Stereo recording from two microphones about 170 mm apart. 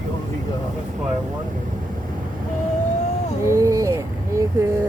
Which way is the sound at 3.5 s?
20° right (ahead or behind).